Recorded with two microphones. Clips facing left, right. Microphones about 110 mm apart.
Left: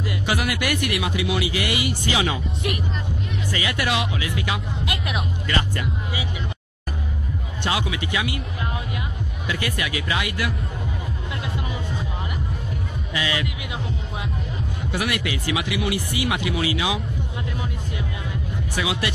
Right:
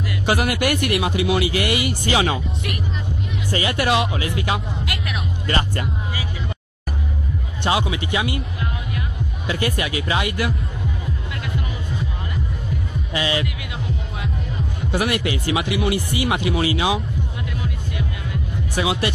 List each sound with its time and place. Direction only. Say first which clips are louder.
0.3 s speech: right 5 dB; 45° right (ahead or behind)
3.5 s speech: right 5 dB; 40° right (ahead or behind)
7.6 s speech: right 4 dB; 25° right (ahead or behind)
9.5 s speech: right 4 dB; 30° right (ahead or behind)
13.1 s speech: right 3 dB; 30° right (ahead or behind)
14.9 s speech: right 4 dB; 35° right (ahead or behind)
18.8 s speech: right 4 dB; 35° right (ahead or behind)